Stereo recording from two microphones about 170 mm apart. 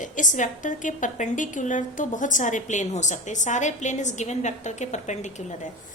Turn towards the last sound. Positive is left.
turn(degrees=45)  # may be behind; listen again after turning